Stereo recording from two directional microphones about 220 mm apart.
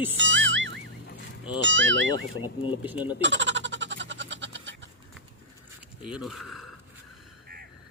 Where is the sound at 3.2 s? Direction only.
55° right (ahead or behind).